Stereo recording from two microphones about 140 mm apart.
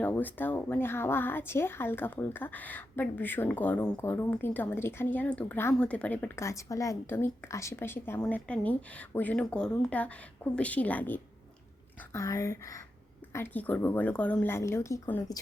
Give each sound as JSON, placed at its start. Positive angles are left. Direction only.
{"t": 0.0, "sound": "a woman's voice", "side_deg": 15}